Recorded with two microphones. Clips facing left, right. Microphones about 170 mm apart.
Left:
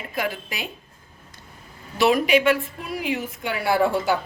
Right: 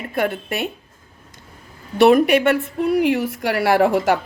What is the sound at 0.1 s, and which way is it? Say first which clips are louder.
Speech: right 6 dB; 60° right (ahead or behind).